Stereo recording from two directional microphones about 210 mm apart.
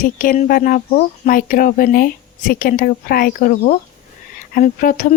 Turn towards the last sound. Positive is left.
turn(degrees=40)  # may be behind; listen again after turning